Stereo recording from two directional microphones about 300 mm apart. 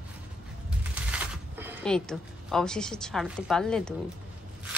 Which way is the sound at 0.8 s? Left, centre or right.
Centre.